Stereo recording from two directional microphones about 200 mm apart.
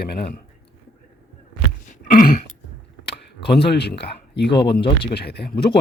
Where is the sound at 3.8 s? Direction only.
55° left (ahead or behind).